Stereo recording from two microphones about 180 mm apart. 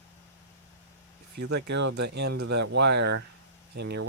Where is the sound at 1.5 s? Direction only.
75° right (ahead or behind).